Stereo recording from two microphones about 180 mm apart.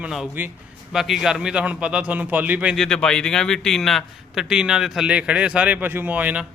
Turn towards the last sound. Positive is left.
turn(degrees=-10)  # may be behind; listen again after turning